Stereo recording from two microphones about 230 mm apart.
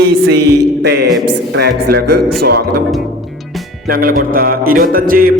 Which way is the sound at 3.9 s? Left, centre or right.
Right.